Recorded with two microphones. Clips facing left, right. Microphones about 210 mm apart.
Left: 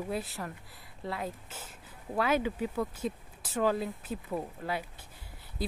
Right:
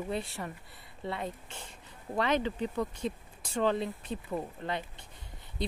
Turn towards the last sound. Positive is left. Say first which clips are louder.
# even
turn(degrees=5)  # may be behind; listen again after turning